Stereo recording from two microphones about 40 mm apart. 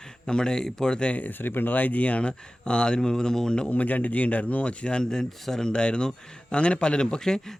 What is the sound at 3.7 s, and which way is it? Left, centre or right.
Speech, left.